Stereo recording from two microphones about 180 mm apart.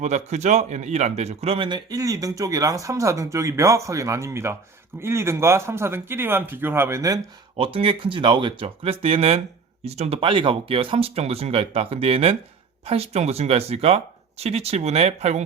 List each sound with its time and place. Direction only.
0.0 s a man's voice: 40° right (ahead or behind); by 7.2 s 15° right (ahead or behind)
7.5 s speech: 30° right (ahead or behind)